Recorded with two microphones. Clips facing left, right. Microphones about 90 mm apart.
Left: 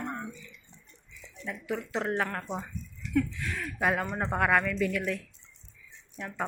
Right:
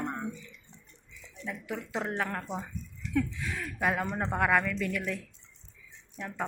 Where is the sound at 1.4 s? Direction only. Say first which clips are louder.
Left 3 dB; centre (ahead or behind).